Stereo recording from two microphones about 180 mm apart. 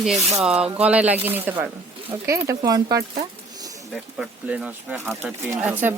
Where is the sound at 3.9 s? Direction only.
5° right (ahead or behind).